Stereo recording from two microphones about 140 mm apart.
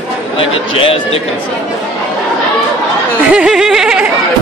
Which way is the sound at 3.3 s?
5° right (ahead or behind).